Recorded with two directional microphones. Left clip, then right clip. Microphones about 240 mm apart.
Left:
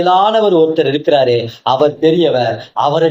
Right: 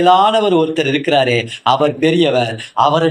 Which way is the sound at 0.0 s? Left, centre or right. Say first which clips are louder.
Even; right.